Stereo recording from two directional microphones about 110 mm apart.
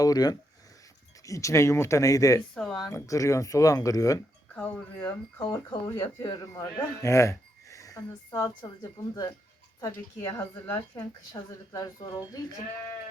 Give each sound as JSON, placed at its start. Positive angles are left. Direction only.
{"t": 0.0, "sound": "speech", "side_deg": 35}
{"t": 2.6, "sound": "speech", "side_deg": 5}
{"t": 2.9, "sound": "speech", "side_deg": 30}
{"t": 4.5, "sound": "speech", "side_deg": 15}
{"t": 4.9, "sound": "speech", "side_deg": 30}
{"t": 10.2, "sound": "speech", "side_deg": 20}
{"t": 10.9, "sound": "speech", "side_deg": 40}